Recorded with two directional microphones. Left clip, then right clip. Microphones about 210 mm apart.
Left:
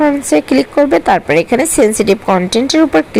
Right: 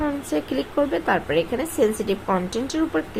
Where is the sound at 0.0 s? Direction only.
35° left (ahead or behind).